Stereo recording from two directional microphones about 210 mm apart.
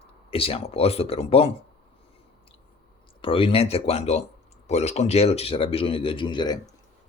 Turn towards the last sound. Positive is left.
turn(degrees=20)  # may be behind; listen again after turning